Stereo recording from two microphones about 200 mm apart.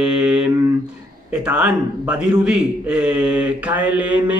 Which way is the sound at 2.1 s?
5° right (ahead or behind).